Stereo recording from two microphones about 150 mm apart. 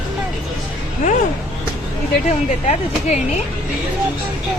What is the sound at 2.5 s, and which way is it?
Speech, 50° left (ahead or behind).